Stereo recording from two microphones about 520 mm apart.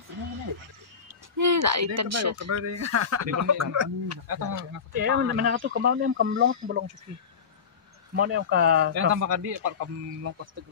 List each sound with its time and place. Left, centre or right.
1.3 s speech: right
4.9 s speech: centre
8.2 s speech: centre
9.0 s speech: right